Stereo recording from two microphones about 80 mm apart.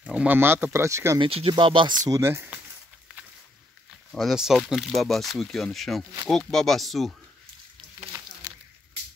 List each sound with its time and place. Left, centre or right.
0.0 s speech: centre
0.4 s speech: right
1.2 s speech: right
2.0 s speech: right
4.2 s speech: centre